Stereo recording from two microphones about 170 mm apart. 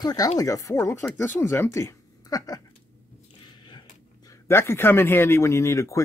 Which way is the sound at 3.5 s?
25° left (ahead or behind).